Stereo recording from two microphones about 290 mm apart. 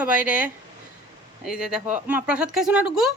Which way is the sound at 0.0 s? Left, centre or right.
Centre.